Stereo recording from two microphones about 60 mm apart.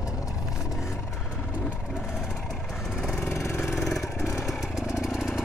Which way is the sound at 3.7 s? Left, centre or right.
Centre.